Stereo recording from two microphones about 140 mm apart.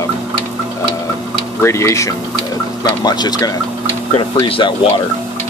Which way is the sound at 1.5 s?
20° left (ahead or behind).